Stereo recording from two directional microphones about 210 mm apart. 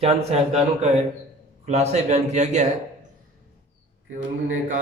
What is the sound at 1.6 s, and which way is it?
A man's voice, 30° right (ahead or behind).